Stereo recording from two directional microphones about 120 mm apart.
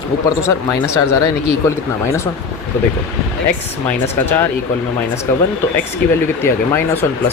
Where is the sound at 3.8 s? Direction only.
15° left (ahead or behind).